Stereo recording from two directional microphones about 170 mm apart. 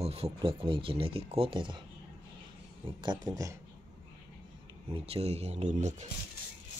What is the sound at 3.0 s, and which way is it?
Speech, 25° right (ahead or behind).